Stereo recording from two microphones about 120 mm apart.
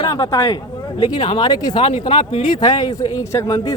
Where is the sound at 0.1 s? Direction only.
30° left (ahead or behind).